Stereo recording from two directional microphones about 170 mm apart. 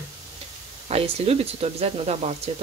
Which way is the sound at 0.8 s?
35° right (ahead or behind).